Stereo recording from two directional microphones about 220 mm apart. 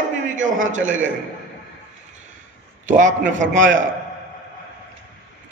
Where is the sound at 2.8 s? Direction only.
35° right (ahead or behind).